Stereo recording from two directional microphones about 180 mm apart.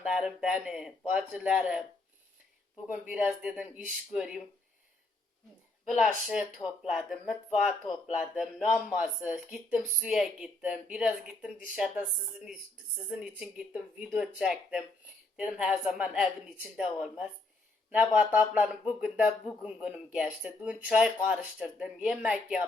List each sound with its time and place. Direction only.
0.0 s speech: centre (ahead or behind)
2.8 s speech: 5° right (ahead or behind)
6.6 s speech: 20° left (ahead or behind)
6.9 s speech: centre (ahead or behind)
13.1 s speech: 5° right (ahead or behind)